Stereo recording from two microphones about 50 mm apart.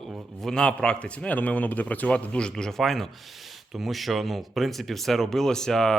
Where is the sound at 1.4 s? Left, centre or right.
Left.